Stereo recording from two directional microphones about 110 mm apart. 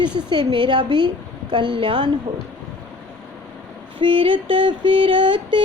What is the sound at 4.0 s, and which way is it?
A woman's voice, 50° right (ahead or behind).